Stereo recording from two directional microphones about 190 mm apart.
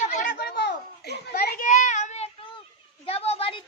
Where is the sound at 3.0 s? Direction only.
30° left (ahead or behind).